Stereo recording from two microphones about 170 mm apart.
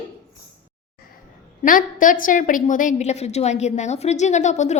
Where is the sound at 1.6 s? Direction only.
50° left (ahead or behind).